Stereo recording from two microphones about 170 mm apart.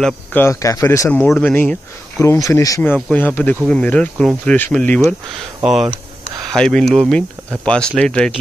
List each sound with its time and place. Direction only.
0.0 s speech: 10° left (ahead or behind)